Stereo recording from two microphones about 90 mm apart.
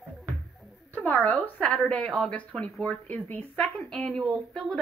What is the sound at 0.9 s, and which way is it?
A woman's voice, 20° left (ahead or behind).